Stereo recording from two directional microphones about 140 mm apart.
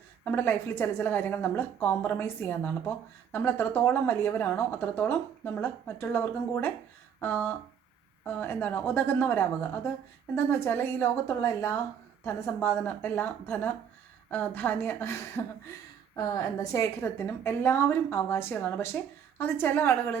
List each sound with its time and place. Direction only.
0.3 s a woman's voice: 15° left (ahead or behind)
16.6 s a woman's voice: 20° left (ahead or behind)